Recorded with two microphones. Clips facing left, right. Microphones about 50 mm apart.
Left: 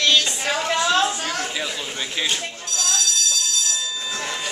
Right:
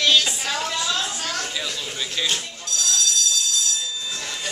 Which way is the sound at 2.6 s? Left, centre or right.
Left.